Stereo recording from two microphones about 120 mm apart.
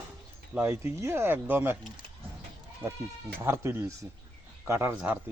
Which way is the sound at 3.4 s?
20° right (ahead or behind).